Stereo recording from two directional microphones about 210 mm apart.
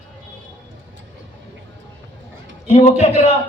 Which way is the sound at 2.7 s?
30° left (ahead or behind).